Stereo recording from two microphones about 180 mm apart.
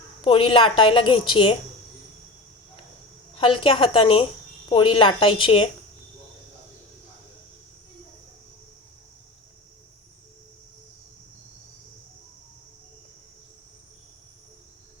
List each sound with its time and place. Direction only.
0.3 s a woman's voice: 30° left (ahead or behind)
3.3 s a woman's voice: 30° left (ahead or behind)